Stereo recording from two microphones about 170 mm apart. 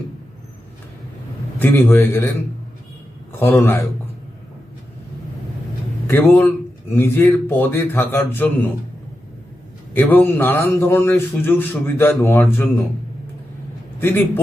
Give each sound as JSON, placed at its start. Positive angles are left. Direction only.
{"t": 1.5, "sound": "a man's voice", "side_deg": 10}
{"t": 3.3, "sound": "a man's voice", "side_deg": 15}
{"t": 6.1, "sound": "a man's voice", "side_deg": 10}
{"t": 9.9, "sound": "a man's voice", "side_deg": 10}
{"t": 14.0, "sound": "a man's voice", "side_deg": 10}